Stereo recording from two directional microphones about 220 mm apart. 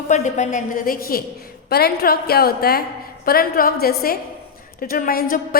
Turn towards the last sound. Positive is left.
turn(degrees=40)  # may be behind; listen again after turning